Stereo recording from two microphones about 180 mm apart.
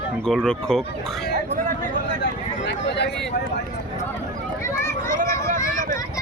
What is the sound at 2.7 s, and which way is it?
Speech, 70° left (ahead or behind).